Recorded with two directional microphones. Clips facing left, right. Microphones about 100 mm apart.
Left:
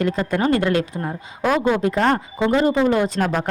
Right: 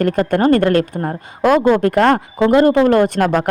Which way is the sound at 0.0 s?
55° right (ahead or behind).